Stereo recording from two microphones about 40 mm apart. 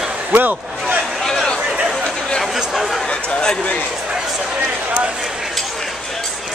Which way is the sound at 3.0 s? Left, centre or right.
Left.